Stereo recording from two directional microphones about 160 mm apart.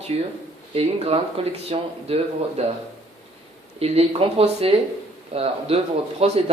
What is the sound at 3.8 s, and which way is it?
Speech, 40° right (ahead or behind).